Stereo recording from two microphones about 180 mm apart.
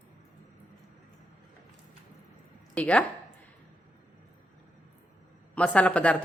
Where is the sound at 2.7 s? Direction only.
5° left (ahead or behind).